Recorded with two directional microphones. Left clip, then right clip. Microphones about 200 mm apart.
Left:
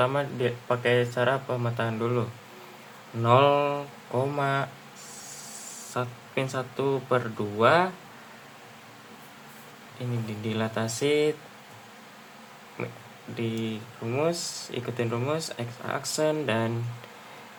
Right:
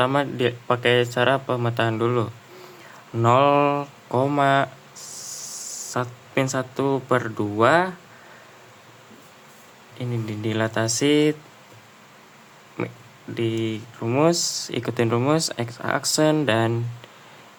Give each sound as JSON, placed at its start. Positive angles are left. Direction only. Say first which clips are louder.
{"t": 0.0, "sound": "speech", "louder": "right 5 dB", "side_deg": -35}
{"t": 5.9, "sound": "speech", "louder": "right 5 dB", "side_deg": -30}
{"t": 10.4, "sound": "speech", "louder": "right 6 dB", "side_deg": -30}
{"t": 13.3, "sound": "speech", "louder": "right 7 dB", "side_deg": -30}
{"t": 14.0, "sound": "speech", "louder": "right 8 dB", "side_deg": -40}